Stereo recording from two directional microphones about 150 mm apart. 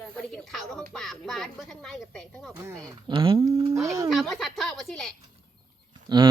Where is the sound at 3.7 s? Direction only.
20° right (ahead or behind).